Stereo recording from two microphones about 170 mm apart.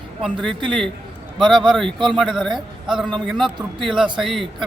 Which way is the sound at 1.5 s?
Centre (ahead or behind).